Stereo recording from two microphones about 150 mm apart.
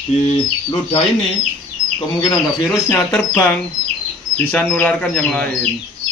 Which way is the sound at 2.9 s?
15° left (ahead or behind).